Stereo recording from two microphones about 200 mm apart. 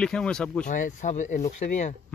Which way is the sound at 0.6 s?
40° left (ahead or behind).